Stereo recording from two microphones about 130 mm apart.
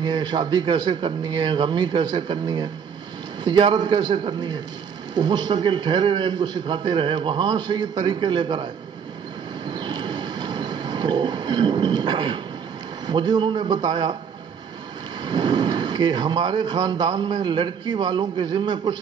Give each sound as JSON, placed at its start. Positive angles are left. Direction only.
{"t": 0.0, "sound": "speech", "side_deg": -35}
{"t": 9.7, "sound": "a sound", "side_deg": -35}
{"t": 13.0, "sound": "speech", "side_deg": -35}
{"t": 15.2, "sound": "speech", "side_deg": -35}